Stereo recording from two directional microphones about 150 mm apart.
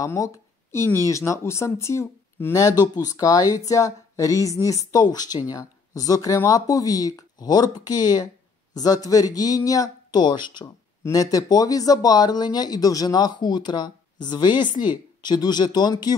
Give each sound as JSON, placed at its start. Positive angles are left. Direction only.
{"t": 0.0, "sound": "speech", "side_deg": 20}